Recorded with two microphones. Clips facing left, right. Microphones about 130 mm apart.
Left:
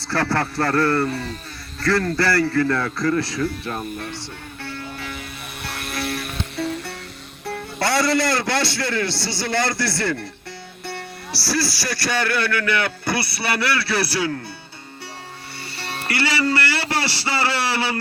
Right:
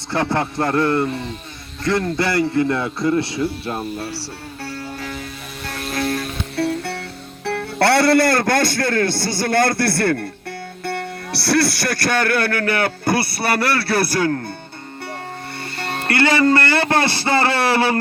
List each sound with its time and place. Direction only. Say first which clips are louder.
0.1 s a man's voice: right 2 dB; 20° right (ahead or behind); by 6.2 s 50° right (ahead or behind)
6.6 s music: right 6 dB; 70° right (ahead or behind)
7.4 s speech: right 7 dB; 65° right (ahead or behind)
15.8 s speech: right 6 dB; 50° right (ahead or behind)